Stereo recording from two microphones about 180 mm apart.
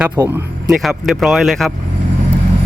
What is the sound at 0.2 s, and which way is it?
Speech, 20° right (ahead or behind).